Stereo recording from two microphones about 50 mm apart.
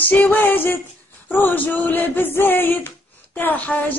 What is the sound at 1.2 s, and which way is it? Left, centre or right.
A man's voice, left.